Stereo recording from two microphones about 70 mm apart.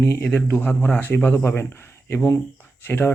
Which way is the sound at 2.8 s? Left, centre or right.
Left.